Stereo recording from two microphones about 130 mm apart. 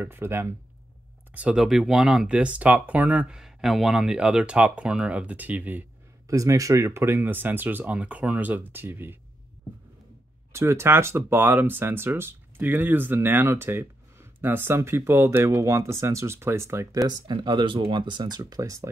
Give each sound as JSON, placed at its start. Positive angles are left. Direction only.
{"t": 0.0, "sound": "speech", "side_deg": -15}
{"t": 6.2, "sound": "speech", "side_deg": -25}
{"t": 10.5, "sound": "speech", "side_deg": -20}